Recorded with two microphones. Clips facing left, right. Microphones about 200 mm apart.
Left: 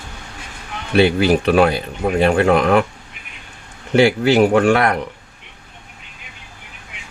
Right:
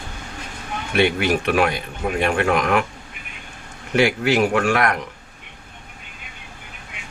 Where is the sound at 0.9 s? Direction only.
30° left (ahead or behind).